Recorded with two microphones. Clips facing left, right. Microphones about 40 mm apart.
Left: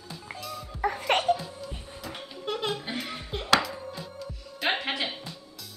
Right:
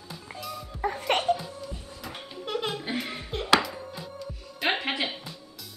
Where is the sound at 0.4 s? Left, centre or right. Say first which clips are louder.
Right 2 dB; centre.